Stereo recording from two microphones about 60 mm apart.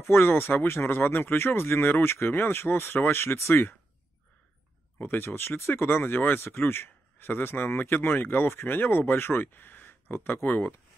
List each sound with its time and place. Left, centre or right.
0.0 s speech: left
4.9 s speech: left